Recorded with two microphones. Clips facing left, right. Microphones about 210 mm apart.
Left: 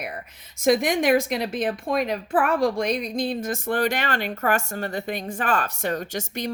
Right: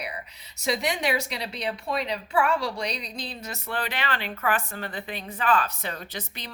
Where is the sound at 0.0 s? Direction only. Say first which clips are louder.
Left 3 dB; 50° left (ahead or behind).